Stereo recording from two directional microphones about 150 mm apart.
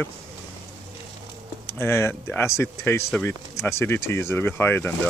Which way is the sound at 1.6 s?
15° left (ahead or behind).